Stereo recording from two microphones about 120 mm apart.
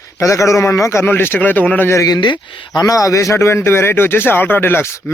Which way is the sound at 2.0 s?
35° left (ahead or behind).